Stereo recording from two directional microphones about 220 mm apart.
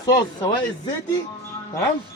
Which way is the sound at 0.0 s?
15° left (ahead or behind).